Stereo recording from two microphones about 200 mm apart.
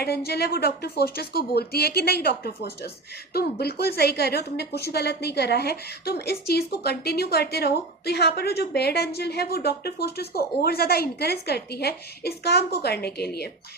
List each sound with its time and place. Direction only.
0.0 s a woman's voice: 55° left (ahead or behind)